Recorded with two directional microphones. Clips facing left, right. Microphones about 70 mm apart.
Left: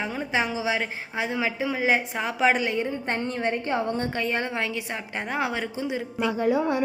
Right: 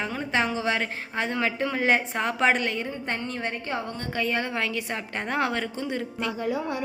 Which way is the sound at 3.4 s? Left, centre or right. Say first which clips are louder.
Left 5 dB; centre.